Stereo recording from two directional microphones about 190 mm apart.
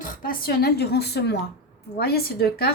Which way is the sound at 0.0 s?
45° left (ahead or behind).